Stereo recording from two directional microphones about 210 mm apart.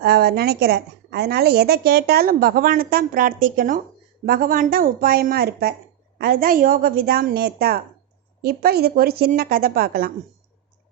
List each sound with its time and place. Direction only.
0.0 s a woman's voice: 50° right (ahead or behind)